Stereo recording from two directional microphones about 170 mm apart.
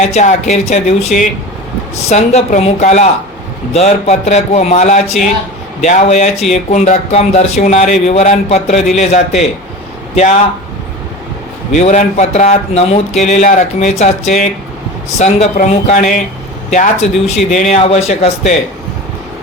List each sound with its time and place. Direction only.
0.1 s speech: 40° left (ahead or behind)
11.7 s speech: 45° left (ahead or behind)